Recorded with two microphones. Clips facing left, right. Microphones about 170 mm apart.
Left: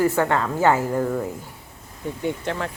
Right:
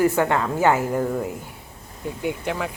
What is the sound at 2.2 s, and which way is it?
Speech, 5° right (ahead or behind).